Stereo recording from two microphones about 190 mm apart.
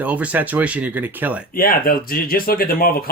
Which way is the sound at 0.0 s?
5° right (ahead or behind).